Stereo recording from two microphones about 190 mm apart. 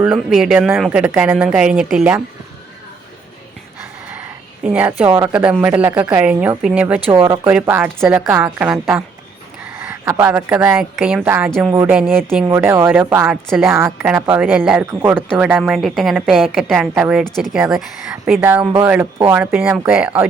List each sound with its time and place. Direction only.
0.0 s speech: 5° right (ahead or behind)
4.6 s a woman's voice: 10° right (ahead or behind)
7.1 s speech: 25° right (ahead or behind)
7.4 s a woman's voice: 10° right (ahead or behind)